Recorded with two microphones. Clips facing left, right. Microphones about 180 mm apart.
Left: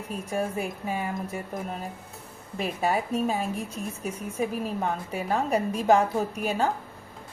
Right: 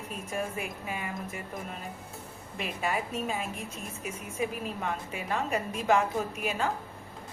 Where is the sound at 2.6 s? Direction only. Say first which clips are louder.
Left 5 dB; 35° left (ahead or behind).